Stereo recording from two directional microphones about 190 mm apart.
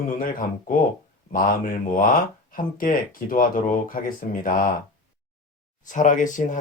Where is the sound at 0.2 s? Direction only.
45° left (ahead or behind).